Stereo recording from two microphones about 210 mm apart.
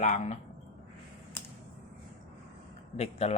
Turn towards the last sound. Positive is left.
turn(degrees=30)  # may be behind; listen again after turning